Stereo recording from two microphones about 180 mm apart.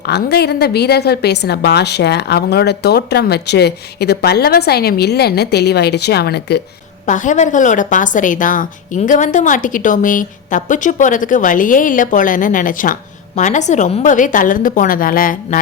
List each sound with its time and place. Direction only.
0.0 s a woman's voice: 65° left (ahead or behind)
7.0 s a woman's voice: 45° left (ahead or behind)